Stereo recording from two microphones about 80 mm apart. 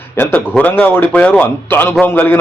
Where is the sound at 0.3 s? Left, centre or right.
Centre.